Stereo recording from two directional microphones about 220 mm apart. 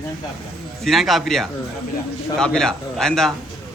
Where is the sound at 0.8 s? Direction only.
Centre (ahead or behind).